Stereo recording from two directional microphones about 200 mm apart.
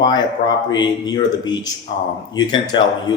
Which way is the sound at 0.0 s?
20° left (ahead or behind).